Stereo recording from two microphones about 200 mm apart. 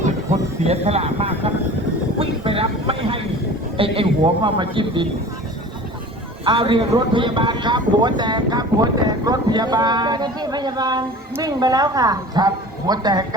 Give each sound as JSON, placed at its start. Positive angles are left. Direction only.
{"t": 0.0, "sound": "vehicle", "side_deg": -35}
{"t": 3.8, "sound": "a man's voice", "side_deg": -25}
{"t": 6.4, "sound": "a man's voice", "side_deg": -25}